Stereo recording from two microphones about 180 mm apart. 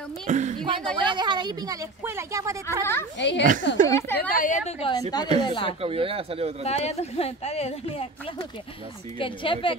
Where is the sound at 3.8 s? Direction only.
15° left (ahead or behind).